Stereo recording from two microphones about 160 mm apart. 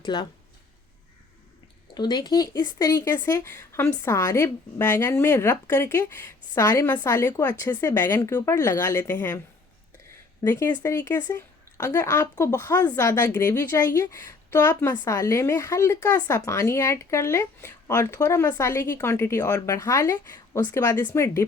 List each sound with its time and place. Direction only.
0.0 s speech: 30° left (ahead or behind)
2.0 s speech: 25° left (ahead or behind)
10.4 s speech: 15° left (ahead or behind)